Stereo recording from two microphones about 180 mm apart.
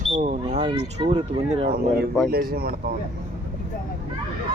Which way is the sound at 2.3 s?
60° right (ahead or behind).